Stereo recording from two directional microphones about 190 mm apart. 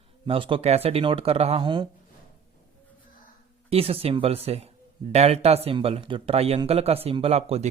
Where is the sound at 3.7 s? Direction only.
30° right (ahead or behind).